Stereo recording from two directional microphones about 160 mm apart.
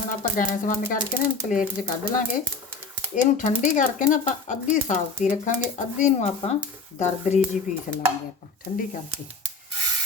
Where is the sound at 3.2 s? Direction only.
55° left (ahead or behind).